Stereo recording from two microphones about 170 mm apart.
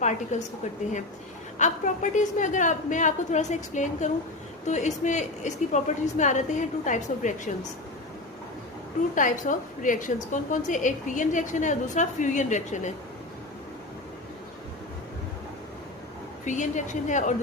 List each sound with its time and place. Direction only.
0.0 s a woman's voice: 45° left (ahead or behind)
1.5 s a woman's voice: 45° left (ahead or behind)
9.1 s a woman's voice: 50° left (ahead or behind)
16.5 s a woman's voice: 45° left (ahead or behind)